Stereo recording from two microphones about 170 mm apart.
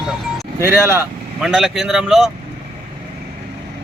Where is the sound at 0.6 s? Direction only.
15° right (ahead or behind).